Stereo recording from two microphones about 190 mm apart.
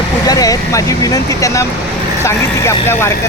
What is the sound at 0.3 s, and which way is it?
Speech, 20° left (ahead or behind).